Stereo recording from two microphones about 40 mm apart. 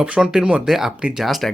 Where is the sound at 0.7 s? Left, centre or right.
Centre.